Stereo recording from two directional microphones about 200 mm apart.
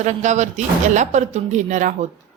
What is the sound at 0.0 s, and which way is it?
A woman's voice, 35° right (ahead or behind).